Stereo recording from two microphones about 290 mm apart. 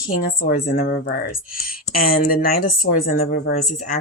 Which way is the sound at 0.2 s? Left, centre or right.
Left.